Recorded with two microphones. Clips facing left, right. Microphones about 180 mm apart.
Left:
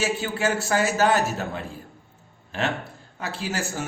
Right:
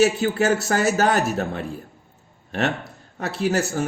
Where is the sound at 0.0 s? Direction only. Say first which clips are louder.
Right 6 dB; 40° right (ahead or behind).